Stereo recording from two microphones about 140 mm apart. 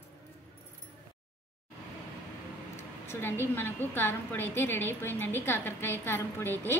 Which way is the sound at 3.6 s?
15° left (ahead or behind).